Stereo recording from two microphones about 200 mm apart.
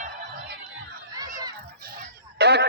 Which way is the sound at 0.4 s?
50° right (ahead or behind).